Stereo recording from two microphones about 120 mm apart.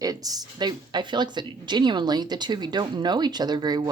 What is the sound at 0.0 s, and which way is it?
A woman's voice, 30° right (ahead or behind).